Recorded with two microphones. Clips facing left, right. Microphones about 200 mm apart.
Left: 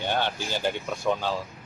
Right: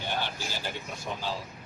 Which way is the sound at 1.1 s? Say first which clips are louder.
Left 12 dB; 70° left (ahead or behind).